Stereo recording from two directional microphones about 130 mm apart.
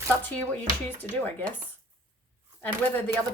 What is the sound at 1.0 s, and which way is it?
Speech, 10° left (ahead or behind).